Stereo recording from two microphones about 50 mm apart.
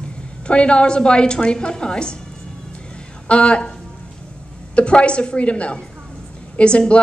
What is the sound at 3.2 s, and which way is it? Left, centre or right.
Speech, left.